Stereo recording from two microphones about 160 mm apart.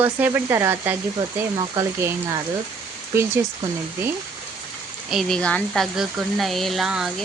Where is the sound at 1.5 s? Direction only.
25° right (ahead or behind).